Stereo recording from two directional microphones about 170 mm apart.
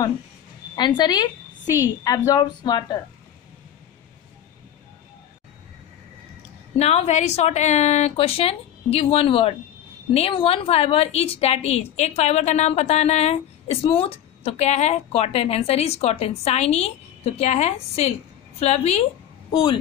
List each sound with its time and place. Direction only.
0.7 s speech: 25° left (ahead or behind)
6.8 s a woman's voice: 40° left (ahead or behind)